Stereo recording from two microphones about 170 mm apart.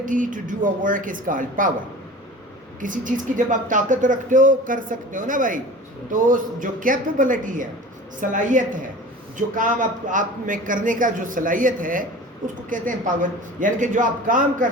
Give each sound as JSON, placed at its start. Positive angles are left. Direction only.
{"t": 0.0, "sound": "speech", "side_deg": -50}
{"t": 2.8, "sound": "speech", "side_deg": -50}